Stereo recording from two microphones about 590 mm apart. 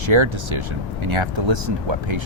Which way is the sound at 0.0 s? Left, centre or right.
Right.